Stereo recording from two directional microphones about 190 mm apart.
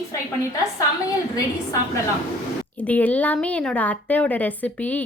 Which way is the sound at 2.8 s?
10° left (ahead or behind).